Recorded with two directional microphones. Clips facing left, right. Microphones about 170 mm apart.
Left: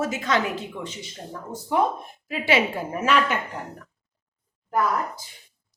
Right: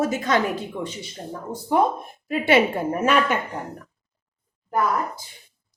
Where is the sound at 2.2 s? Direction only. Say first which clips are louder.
Right 4 dB; 55° right (ahead or behind).